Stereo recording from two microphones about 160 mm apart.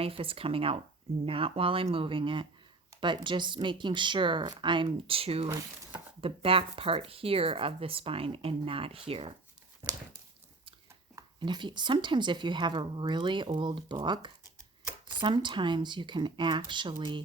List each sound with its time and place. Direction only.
0.0 s speech: 35° right (ahead or behind)
5.5 s speech: 15° right (ahead or behind)
6.2 s speech: 35° right (ahead or behind)
9.8 s a sound: 20° right (ahead or behind)
11.1 s speech: 30° right (ahead or behind)